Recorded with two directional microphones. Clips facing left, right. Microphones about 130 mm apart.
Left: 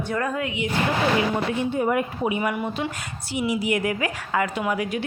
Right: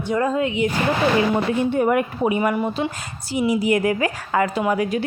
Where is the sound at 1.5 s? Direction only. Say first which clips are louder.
Right 4 dB; 60° right (ahead or behind).